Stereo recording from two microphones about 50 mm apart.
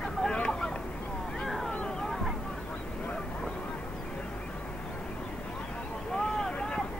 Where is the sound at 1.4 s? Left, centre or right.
Centre.